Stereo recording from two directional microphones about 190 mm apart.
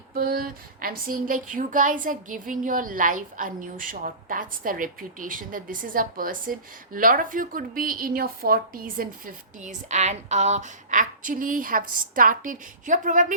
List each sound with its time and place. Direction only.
0.1 s speech: 50° right (ahead or behind)